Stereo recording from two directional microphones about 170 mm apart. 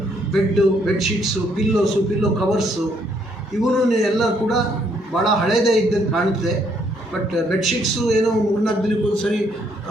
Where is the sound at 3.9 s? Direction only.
Centre (ahead or behind).